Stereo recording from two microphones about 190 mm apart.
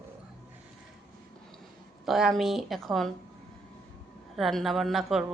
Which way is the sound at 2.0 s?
Centre (ahead or behind).